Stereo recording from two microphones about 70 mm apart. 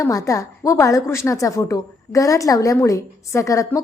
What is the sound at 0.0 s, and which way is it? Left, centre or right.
A woman's voice, left.